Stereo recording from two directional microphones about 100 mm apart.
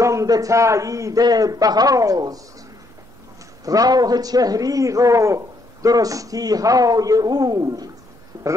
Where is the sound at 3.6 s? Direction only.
40° right (ahead or behind).